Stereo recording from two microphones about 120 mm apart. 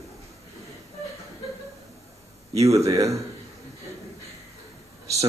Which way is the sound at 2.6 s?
25° right (ahead or behind).